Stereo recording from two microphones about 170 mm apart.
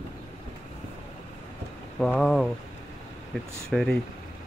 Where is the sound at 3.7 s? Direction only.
Centre (ahead or behind).